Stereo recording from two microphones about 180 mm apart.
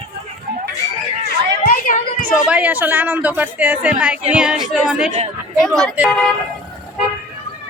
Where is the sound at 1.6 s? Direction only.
50° left (ahead or behind).